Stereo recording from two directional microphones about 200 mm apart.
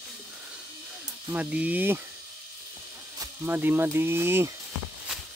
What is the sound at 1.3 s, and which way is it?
Speech, 5° right (ahead or behind).